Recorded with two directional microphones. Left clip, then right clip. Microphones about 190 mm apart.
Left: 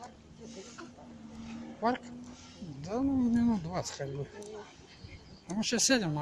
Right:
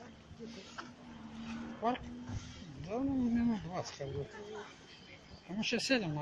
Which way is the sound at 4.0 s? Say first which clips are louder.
Left 4 dB; 25° left (ahead or behind).